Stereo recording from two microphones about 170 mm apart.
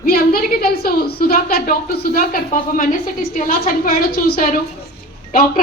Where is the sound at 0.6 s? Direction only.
60° left (ahead or behind).